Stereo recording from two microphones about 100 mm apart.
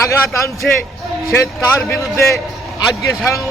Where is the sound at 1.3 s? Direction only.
25° left (ahead or behind).